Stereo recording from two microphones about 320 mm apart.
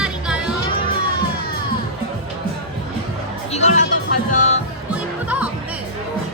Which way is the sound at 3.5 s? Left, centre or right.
Left.